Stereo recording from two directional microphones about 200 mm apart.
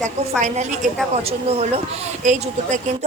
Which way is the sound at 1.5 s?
30° right (ahead or behind).